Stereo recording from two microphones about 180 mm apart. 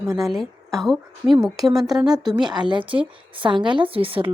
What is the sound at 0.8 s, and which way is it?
A woman's voice, centre (ahead or behind).